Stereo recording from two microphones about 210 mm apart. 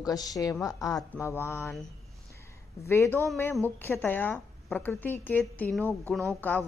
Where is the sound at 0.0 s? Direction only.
15° left (ahead or behind).